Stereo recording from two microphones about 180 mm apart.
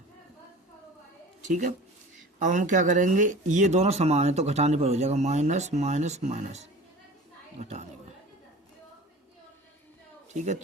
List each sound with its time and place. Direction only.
1.5 s speech: 45° right (ahead or behind)
10.3 s speech: 40° right (ahead or behind)